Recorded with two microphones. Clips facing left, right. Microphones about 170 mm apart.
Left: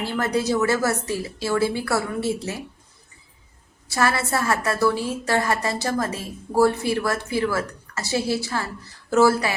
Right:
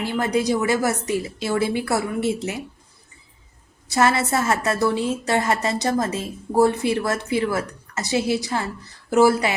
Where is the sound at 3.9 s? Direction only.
20° right (ahead or behind).